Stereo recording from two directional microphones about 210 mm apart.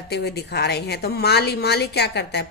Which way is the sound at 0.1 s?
50° left (ahead or behind).